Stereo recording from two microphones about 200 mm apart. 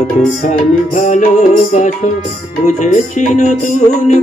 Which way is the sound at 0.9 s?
40° left (ahead or behind).